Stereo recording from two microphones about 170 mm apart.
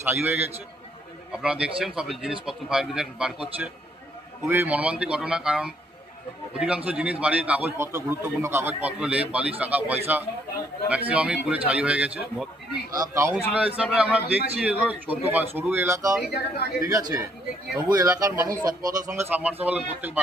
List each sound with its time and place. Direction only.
0.0 s a man's voice: 10° right (ahead or behind)
12.9 s speech: 20° right (ahead or behind)
13.5 s a man's voice: 5° right (ahead or behind)
16.2 s speech: 70° left (ahead or behind)
16.8 s speech: 20° right (ahead or behind)
19.1 s a man's voice: 10° right (ahead or behind)